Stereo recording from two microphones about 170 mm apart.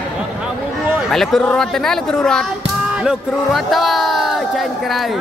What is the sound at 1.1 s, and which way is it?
Speech, centre (ahead or behind).